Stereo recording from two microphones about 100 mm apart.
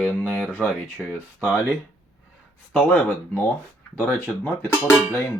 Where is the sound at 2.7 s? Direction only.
15° left (ahead or behind).